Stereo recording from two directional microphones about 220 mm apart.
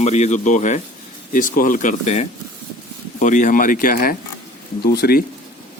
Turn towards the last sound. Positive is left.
turn(degrees=45)  # may be behind; listen again after turning